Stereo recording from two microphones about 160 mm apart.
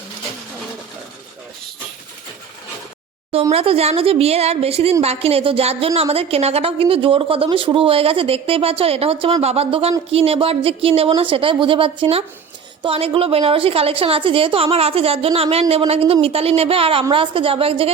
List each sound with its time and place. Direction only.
3.5 s a woman's voice: 35° right (ahead or behind)